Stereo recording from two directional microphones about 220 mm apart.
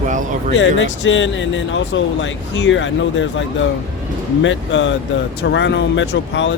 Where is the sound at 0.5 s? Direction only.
60° left (ahead or behind).